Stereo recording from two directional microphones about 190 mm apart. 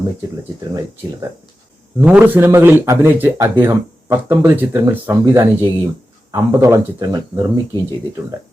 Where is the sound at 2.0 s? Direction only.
10° right (ahead or behind).